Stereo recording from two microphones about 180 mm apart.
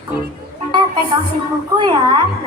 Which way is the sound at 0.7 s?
25° right (ahead or behind).